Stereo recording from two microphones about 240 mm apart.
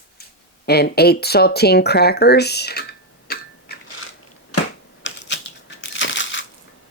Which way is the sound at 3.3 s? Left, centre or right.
Left.